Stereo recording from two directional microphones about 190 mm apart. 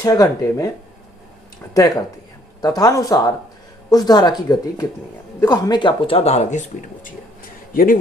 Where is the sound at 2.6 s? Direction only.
20° left (ahead or behind); by 8.0 s 50° left (ahead or behind).